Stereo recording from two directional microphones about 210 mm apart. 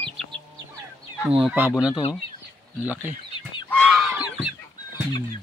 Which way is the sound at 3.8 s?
5° right (ahead or behind).